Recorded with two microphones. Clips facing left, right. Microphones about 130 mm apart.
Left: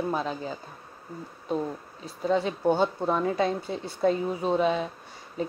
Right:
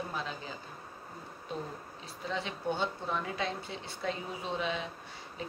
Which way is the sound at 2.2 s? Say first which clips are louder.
Left 11 dB; 45° left (ahead or behind).